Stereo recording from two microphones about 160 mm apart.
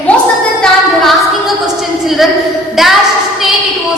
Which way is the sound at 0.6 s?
Centre (ahead or behind).